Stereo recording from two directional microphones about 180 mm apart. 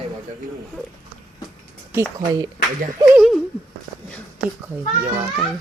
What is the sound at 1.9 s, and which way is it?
Speech, 15° right (ahead or behind).